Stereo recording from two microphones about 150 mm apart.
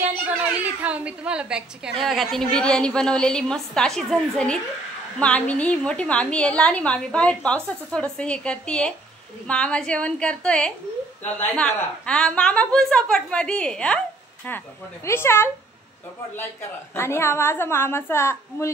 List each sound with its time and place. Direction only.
0.7 s a woman's voice: 10° right (ahead or behind); by 15.5 s 15° left (ahead or behind)
16.9 s a woman's voice: 15° left (ahead or behind)